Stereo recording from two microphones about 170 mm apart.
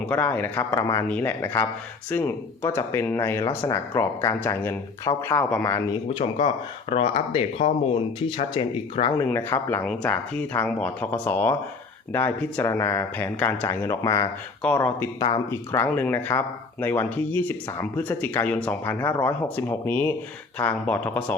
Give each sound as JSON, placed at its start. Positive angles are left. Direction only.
{"t": 0.0, "sound": "speech", "side_deg": 10}
{"t": 6.1, "sound": "speech", "side_deg": 30}
{"t": 9.1, "sound": "speech", "side_deg": 15}
{"t": 14.6, "sound": "speech", "side_deg": 10}